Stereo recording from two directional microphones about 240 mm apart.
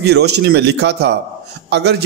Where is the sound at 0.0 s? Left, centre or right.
Right.